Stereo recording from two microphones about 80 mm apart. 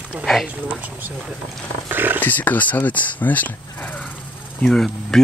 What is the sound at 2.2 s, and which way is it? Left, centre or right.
Speech, left.